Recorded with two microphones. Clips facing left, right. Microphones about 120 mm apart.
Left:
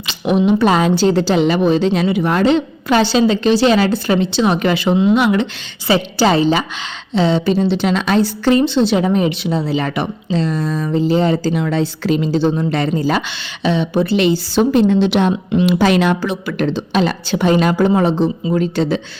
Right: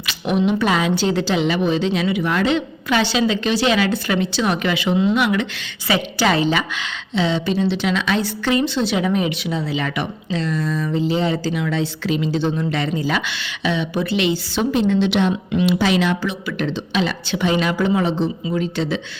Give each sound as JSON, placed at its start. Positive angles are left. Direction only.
{"t": 0.1, "sound": "a woman's voice", "side_deg": 30}